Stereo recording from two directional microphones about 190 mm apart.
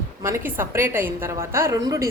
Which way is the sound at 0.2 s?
15° right (ahead or behind).